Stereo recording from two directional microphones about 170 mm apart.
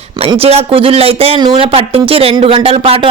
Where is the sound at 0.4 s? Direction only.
35° right (ahead or behind).